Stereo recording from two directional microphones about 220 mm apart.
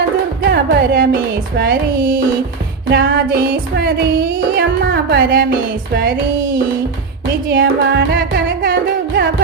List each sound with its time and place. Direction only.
0.4 s music: 45° right (ahead or behind)
7.4 s music: 40° right (ahead or behind)